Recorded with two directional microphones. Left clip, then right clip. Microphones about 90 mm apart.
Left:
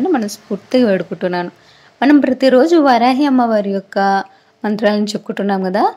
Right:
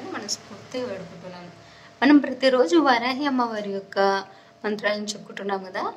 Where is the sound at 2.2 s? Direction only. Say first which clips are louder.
Left 9 dB; 35° left (ahead or behind).